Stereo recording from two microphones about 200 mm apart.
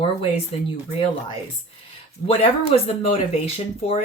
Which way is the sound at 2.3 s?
30° left (ahead or behind).